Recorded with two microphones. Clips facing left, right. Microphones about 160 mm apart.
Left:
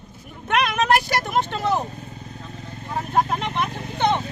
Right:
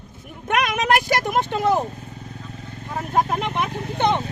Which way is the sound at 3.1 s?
10° right (ahead or behind).